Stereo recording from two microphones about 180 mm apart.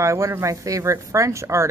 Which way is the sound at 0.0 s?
15° right (ahead or behind).